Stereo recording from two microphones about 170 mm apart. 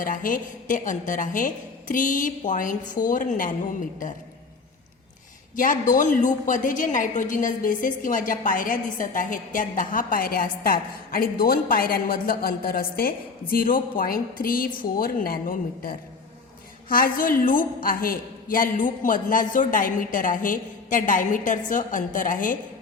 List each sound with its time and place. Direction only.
0.0 s a woman's voice: 50° left (ahead or behind)
5.5 s a woman's voice: 50° left (ahead or behind)